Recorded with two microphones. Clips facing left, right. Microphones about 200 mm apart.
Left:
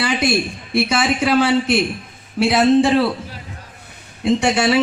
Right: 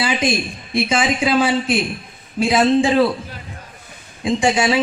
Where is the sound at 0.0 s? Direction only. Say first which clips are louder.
Left 1 dB; 65° left (ahead or behind).